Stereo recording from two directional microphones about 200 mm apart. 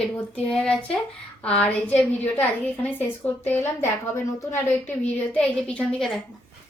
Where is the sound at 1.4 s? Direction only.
5° left (ahead or behind).